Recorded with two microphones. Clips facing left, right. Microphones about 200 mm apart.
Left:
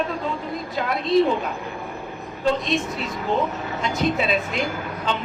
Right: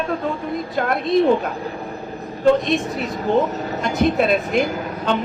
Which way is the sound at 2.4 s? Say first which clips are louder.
Right 6 dB; 50° right (ahead or behind).